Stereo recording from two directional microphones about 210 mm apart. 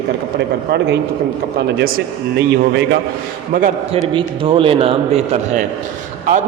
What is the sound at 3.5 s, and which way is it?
Speech, 40° right (ahead or behind).